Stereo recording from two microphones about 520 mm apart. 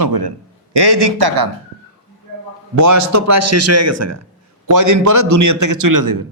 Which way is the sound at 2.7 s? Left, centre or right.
Right.